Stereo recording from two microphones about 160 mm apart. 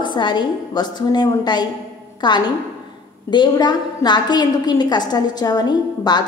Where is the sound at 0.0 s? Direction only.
30° left (ahead or behind).